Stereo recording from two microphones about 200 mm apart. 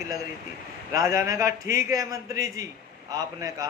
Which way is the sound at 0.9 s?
15° right (ahead or behind).